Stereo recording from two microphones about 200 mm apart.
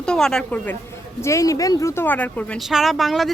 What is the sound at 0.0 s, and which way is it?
A woman's voice, 5° left (ahead or behind).